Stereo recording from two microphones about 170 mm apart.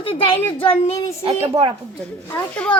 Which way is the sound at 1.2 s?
30° right (ahead or behind).